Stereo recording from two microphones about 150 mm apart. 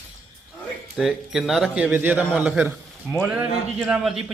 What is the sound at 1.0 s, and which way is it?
Speech, 5° right (ahead or behind).